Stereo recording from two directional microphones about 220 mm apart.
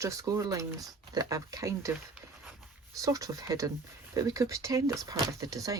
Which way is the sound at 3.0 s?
15° right (ahead or behind).